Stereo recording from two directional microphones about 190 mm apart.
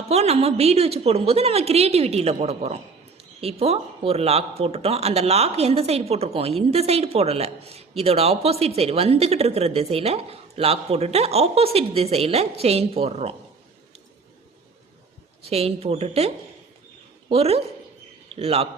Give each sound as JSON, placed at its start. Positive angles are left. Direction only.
{"t": 0.1, "sound": "speech", "side_deg": -35}
{"t": 15.4, "sound": "a woman's voice", "side_deg": -30}